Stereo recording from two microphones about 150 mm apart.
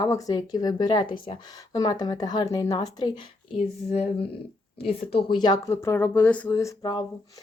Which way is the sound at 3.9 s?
45° left (ahead or behind).